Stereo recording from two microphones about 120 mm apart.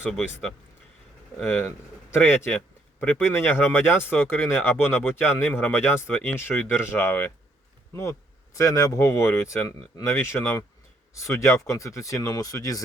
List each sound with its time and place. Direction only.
0.1 s speech: 5° left (ahead or behind)
8.5 s speech: 25° left (ahead or behind)